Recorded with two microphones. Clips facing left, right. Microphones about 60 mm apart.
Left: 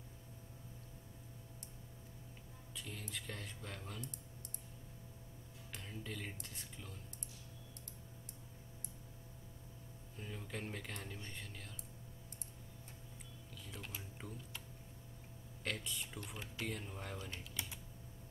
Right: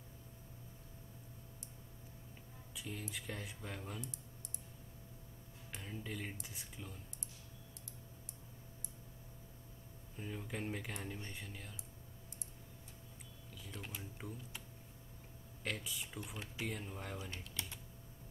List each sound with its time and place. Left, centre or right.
2.7 s speech: centre
5.7 s speech: centre
10.1 s speech: centre
13.6 s speech: centre
15.6 s speech: centre